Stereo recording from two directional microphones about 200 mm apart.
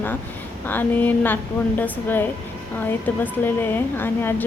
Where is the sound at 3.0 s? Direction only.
10° left (ahead or behind).